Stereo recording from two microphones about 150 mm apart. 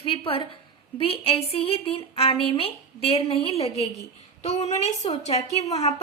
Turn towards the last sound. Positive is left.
turn(degrees=45)  # may be behind; listen again after turning